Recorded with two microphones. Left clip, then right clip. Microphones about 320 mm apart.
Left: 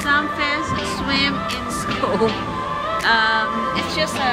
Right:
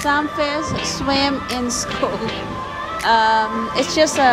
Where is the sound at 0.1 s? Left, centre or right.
Centre.